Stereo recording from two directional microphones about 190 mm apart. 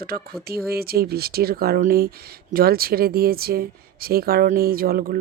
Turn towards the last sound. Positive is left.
turn(degrees=-50)  # may be behind; listen again after turning